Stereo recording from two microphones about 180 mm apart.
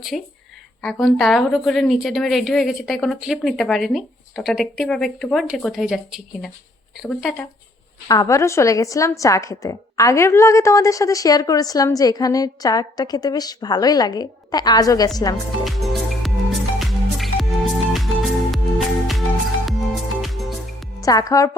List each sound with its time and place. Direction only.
0.1 s a woman's voice: 5° left (ahead or behind)
8.0 s a woman's voice: 20° left (ahead or behind)
15.6 s music: centre (ahead or behind)
20.2 s music: centre (ahead or behind)
21.0 s a woman's voice: 20° left (ahead or behind)